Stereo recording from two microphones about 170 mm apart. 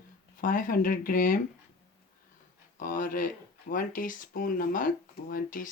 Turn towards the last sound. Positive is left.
turn(degrees=55)  # may be behind; listen again after turning